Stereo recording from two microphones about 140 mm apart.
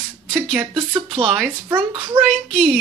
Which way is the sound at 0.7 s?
35° right (ahead or behind).